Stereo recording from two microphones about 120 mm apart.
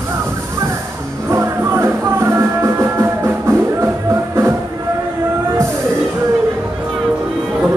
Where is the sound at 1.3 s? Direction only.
20° right (ahead or behind).